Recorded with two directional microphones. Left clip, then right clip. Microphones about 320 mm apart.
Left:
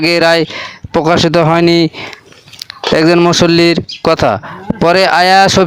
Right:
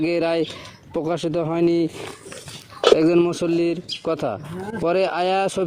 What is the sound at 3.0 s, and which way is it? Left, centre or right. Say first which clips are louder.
Speech: left 10 dB; left.